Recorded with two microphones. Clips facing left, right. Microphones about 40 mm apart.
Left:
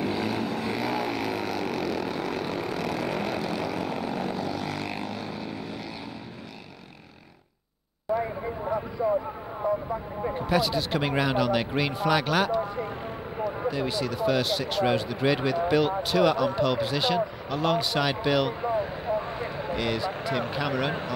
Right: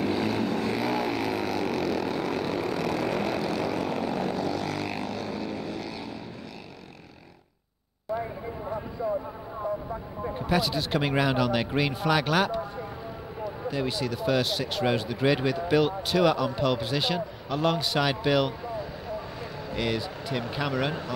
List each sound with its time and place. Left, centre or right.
0.0 s vehicle: centre
10.4 s speech: centre
13.7 s speech: centre
18.6 s vehicle: left
19.8 s speech: centre